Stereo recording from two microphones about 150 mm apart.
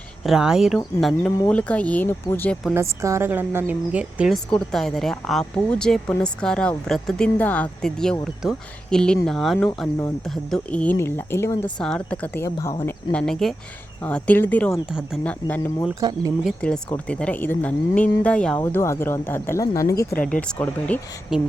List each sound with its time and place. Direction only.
0.2 s speech: centre (ahead or behind); by 2.6 s 15° left (ahead or behind)
2.7 s a woman's voice: 20° right (ahead or behind)
4.5 s speech: 5° left (ahead or behind)
11.8 s speech: 5° left (ahead or behind)
14.8 s speech: 5° right (ahead or behind)
15.2 s speech: 10° left (ahead or behind)
16.0 s speech: 25° right (ahead or behind)
16.4 s speech: centre (ahead or behind)
18.6 s speech: 20° left (ahead or behind)
21.3 s speech: 5° right (ahead or behind)